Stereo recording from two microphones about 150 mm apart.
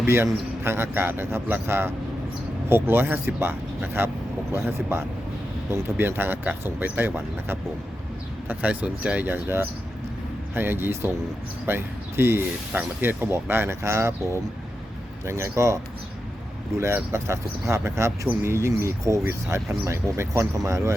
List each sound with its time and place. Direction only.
0.0 s speech: 15° right (ahead or behind)
15.3 s speech: 20° right (ahead or behind)